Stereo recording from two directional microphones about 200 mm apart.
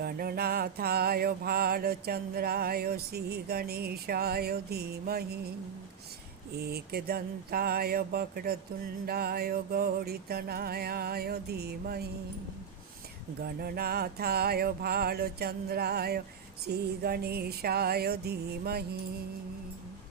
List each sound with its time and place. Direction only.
0.0 s mantra: 50° right (ahead or behind)
6.6 s mantra: 50° right (ahead or behind)
13.4 s mantra: 50° right (ahead or behind)